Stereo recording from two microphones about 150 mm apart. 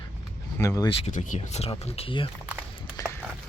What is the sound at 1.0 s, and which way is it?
Speech, 55° left (ahead or behind).